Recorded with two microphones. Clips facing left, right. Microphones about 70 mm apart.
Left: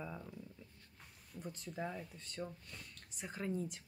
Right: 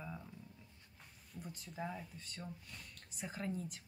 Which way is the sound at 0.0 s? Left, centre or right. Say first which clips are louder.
Left 2 dB; centre.